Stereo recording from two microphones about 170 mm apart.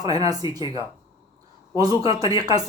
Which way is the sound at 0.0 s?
20° right (ahead or behind).